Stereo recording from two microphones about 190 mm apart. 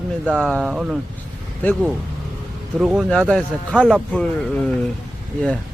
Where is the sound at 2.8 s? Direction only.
Centre (ahead or behind).